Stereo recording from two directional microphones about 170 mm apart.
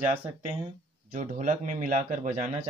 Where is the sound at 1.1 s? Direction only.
45° right (ahead or behind).